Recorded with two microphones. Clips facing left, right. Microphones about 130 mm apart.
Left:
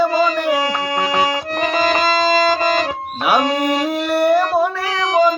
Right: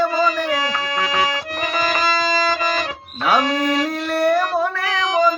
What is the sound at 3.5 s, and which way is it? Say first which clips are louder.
Music: left 2 dB; 20° left (ahead or behind).